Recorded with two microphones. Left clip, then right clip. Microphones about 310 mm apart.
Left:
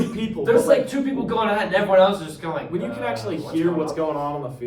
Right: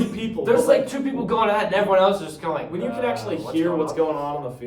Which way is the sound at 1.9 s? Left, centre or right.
Centre.